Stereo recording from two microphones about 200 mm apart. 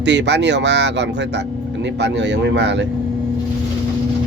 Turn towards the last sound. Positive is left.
turn(degrees=-60)  # may be behind; listen again after turning